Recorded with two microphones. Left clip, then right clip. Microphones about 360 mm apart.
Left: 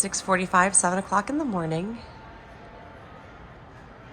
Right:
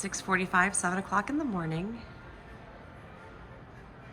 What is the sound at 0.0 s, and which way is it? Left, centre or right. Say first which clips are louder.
A woman's voice: left 5 dB; centre.